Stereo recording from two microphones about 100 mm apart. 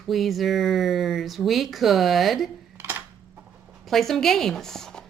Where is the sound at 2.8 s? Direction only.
25° right (ahead or behind).